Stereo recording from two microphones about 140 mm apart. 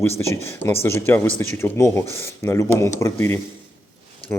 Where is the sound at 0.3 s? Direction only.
15° left (ahead or behind).